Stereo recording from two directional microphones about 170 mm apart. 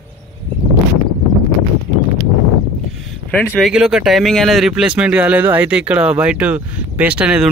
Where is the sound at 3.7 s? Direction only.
5° right (ahead or behind).